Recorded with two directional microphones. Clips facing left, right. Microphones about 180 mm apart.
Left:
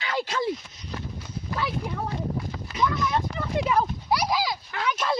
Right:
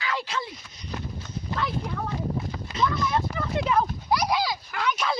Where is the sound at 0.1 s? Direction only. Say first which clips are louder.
Left 4 dB; 45° left (ahead or behind).